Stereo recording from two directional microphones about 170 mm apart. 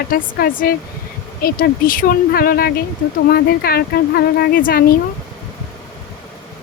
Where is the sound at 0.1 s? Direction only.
60° left (ahead or behind).